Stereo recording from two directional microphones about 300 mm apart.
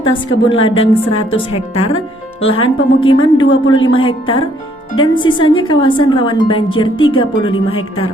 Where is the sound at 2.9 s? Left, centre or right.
Left.